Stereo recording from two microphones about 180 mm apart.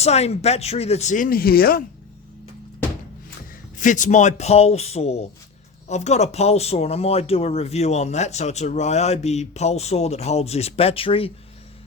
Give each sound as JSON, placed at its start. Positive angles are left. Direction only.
{"t": 0.0, "sound": "speech", "side_deg": 35}
{"t": 3.8, "sound": "speech", "side_deg": 45}